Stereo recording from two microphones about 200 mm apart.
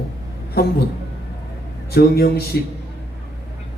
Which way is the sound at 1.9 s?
50° left (ahead or behind).